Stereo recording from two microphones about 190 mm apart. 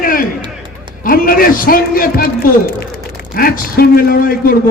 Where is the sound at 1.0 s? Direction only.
50° left (ahead or behind).